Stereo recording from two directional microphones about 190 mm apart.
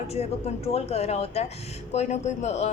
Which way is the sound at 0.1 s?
35° left (ahead or behind).